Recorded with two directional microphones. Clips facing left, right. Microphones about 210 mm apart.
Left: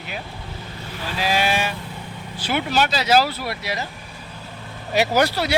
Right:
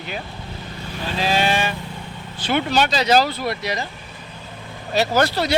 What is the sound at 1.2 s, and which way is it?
Speech, 10° left (ahead or behind).